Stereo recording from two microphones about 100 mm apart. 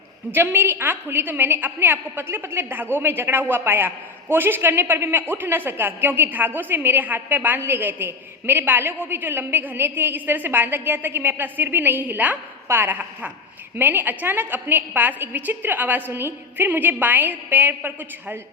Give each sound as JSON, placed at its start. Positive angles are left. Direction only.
{"t": 0.3, "sound": "a woman's voice", "side_deg": -20}